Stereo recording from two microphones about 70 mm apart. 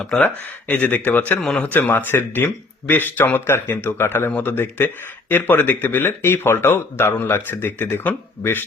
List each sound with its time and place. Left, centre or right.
0.2 s speech: left
1.4 s a man's voice: centre
1.8 s speech: left